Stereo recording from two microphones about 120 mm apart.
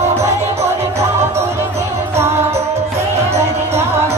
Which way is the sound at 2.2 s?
20° right (ahead or behind).